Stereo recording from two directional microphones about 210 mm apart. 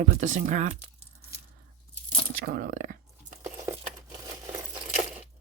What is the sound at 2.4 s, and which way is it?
Speech, 50° right (ahead or behind).